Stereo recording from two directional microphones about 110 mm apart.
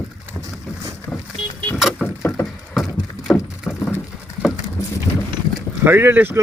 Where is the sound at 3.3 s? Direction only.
15° left (ahead or behind).